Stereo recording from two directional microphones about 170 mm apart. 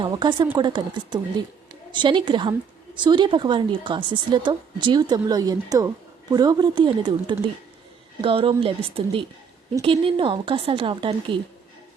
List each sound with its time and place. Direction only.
0.0 s a woman's voice: 25° right (ahead or behind)